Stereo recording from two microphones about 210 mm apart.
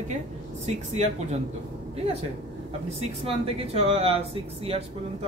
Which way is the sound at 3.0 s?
30° right (ahead or behind).